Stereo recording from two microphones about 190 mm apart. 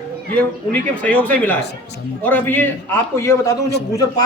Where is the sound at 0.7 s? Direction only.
5° left (ahead or behind).